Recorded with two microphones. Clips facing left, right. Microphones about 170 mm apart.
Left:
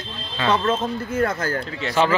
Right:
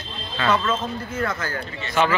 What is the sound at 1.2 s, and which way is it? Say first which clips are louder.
Speech: left 4 dB; 45° left (ahead or behind).